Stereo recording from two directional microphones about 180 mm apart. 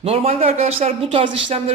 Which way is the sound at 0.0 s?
35° right (ahead or behind).